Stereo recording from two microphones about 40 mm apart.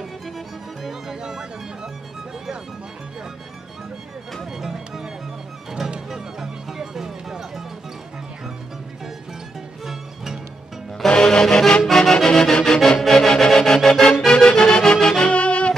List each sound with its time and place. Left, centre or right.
0.8 s music: centre
4.5 s music: centre
9.8 s music: centre
11.1 s music: centre
15.3 s music: left